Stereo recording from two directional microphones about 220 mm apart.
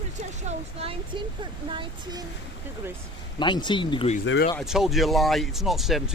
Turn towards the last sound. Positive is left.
turn(degrees=0)  # may be behind; listen again after turning